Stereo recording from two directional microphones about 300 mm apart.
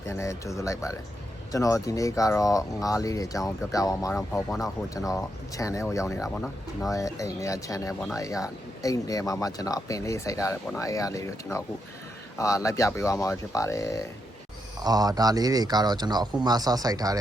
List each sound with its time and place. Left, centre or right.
0.0 s speech: centre
12.4 s speech: centre
14.8 s speech: centre